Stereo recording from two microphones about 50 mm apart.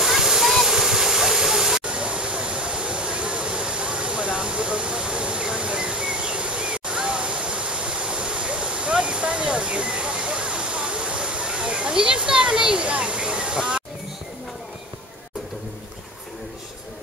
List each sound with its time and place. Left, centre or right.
0.0 s waterfall: centre